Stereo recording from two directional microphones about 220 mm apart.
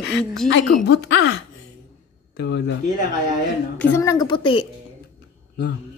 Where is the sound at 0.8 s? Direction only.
50° left (ahead or behind).